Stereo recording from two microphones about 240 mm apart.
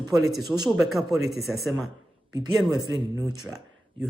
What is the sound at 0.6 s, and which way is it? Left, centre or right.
Speech, centre.